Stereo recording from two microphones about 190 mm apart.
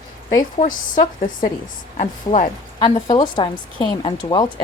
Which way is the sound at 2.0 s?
40° left (ahead or behind).